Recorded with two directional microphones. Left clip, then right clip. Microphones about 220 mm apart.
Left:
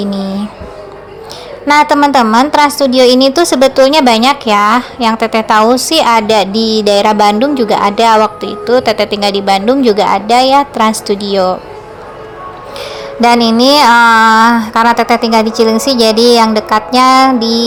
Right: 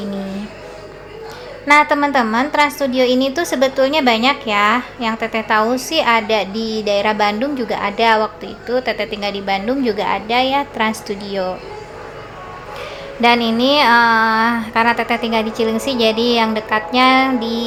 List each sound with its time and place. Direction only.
1.6 s a woman's voice: 30° left (ahead or behind)
12.8 s speech: 30° left (ahead or behind)